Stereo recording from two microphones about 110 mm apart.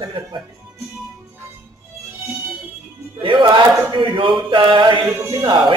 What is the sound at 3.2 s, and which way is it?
Music, 45° right (ahead or behind).